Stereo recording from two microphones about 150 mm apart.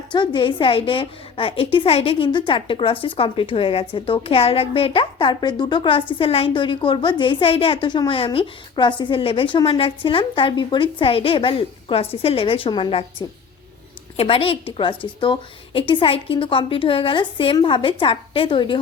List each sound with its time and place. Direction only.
0.1 s a woman's voice: 30° left (ahead or behind)
14.2 s a woman's voice: 40° left (ahead or behind)